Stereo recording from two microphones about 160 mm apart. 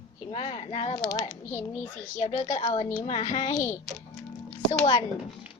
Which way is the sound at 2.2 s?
45° left (ahead or behind).